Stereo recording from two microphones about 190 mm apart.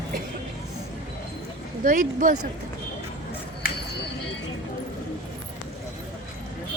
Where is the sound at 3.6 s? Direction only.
50° left (ahead or behind).